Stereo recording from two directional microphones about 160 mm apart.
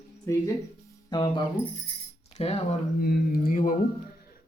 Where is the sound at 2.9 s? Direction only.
70° left (ahead or behind).